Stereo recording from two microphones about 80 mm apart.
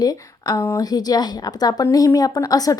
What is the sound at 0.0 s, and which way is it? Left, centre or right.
Speech, left.